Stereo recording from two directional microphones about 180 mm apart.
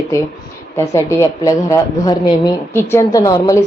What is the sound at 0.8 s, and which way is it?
A woman's voice, 20° left (ahead or behind).